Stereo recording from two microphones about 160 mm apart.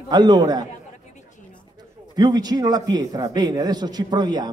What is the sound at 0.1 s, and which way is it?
Speech, 25° right (ahead or behind).